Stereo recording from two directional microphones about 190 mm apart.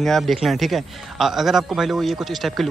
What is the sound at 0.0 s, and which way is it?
A man's voice, centre (ahead or behind).